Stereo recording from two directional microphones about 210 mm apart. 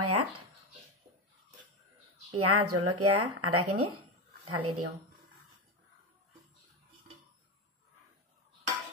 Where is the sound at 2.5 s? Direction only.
90° right.